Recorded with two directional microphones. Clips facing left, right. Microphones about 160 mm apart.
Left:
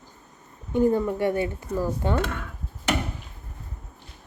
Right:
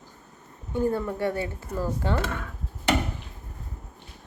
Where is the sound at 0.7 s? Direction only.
15° left (ahead or behind).